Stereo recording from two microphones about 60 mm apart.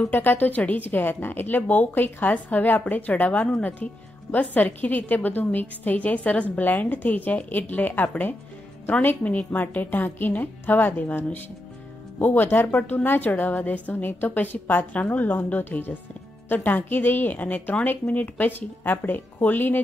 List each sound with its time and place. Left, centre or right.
0.1 s a woman's voice: left